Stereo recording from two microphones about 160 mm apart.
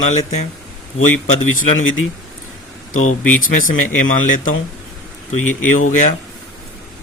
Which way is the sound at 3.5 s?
55° left (ahead or behind).